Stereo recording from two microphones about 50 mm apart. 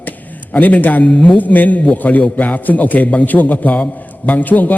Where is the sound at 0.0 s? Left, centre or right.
Left.